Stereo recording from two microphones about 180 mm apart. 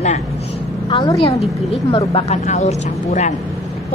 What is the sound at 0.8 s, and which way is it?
A woman's voice, 30° left (ahead or behind).